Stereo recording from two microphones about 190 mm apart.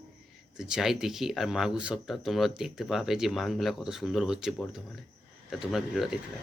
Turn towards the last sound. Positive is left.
turn(degrees=0)  # may be behind; listen again after turning